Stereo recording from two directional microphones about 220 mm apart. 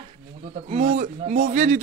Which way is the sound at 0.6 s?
30° right (ahead or behind).